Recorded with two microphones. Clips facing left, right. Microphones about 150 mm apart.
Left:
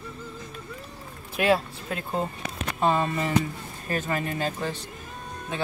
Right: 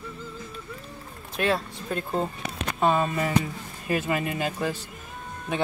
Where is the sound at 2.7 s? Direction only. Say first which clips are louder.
Right 1 dB; 5° right (ahead or behind).